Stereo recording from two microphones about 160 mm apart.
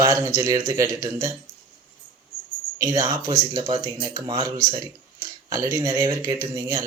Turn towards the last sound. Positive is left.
turn(degrees=-20)  # may be behind; listen again after turning